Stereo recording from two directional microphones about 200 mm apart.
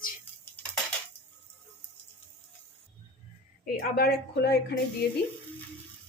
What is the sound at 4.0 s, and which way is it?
Speech, 55° left (ahead or behind).